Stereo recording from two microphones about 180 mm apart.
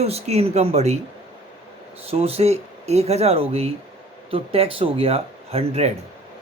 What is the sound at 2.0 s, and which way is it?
Speech, 35° right (ahead or behind).